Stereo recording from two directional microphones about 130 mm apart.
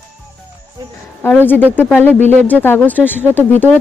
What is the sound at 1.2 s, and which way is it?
A woman's voice, 15° left (ahead or behind).